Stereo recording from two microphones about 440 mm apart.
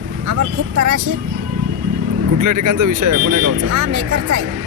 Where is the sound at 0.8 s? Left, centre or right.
Right.